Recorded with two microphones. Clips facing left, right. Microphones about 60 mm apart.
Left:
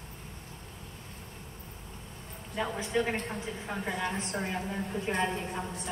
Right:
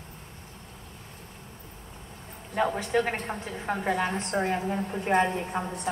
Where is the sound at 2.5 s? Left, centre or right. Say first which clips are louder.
Right 5 dB; right.